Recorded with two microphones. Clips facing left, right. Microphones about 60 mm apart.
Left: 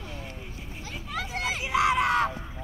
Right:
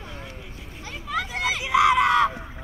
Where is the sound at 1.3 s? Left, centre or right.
Right.